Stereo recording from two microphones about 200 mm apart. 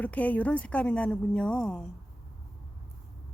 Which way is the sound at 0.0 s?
5° left (ahead or behind).